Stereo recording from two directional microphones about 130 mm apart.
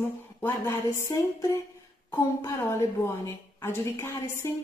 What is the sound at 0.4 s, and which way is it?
A woman's voice, 20° left (ahead or behind).